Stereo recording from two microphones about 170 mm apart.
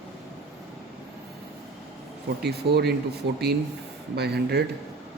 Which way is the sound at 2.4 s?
70° right (ahead or behind).